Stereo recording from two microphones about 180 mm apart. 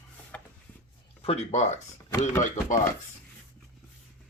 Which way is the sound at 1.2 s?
35° left (ahead or behind).